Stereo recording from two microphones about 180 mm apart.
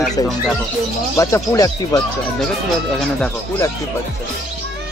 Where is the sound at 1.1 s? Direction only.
20° left (ahead or behind).